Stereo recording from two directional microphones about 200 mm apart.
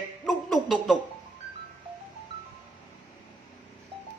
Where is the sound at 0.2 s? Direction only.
Centre (ahead or behind).